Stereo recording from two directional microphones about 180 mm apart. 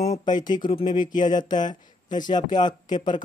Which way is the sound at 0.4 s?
25° left (ahead or behind).